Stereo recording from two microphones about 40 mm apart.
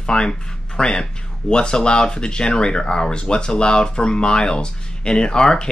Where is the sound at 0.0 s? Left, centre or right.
Left.